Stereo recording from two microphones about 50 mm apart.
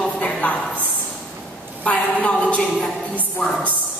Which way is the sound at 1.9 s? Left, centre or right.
Left.